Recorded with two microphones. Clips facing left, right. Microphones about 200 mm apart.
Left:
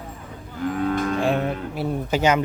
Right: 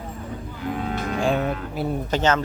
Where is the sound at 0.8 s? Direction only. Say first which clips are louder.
Left 7 dB; 50° left (ahead or behind).